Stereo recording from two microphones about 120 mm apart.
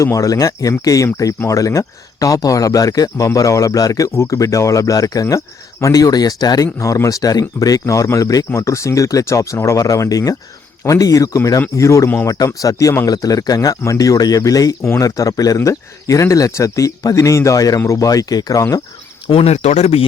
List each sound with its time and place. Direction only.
0.0 s speech: 25° left (ahead or behind)
19.3 s speech: 60° left (ahead or behind)